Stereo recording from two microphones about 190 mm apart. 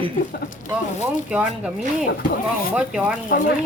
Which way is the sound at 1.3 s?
5° right (ahead or behind).